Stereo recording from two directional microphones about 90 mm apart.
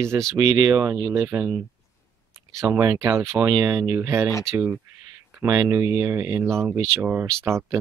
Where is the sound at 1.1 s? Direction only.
30° right (ahead or behind).